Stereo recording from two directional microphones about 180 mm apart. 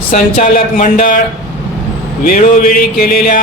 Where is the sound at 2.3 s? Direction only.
45° left (ahead or behind).